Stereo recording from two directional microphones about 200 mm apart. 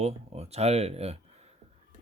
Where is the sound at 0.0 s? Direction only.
30° right (ahead or behind).